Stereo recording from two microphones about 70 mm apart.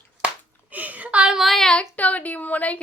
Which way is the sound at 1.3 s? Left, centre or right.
Centre.